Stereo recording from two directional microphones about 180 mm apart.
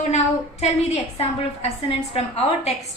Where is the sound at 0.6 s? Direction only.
35° left (ahead or behind).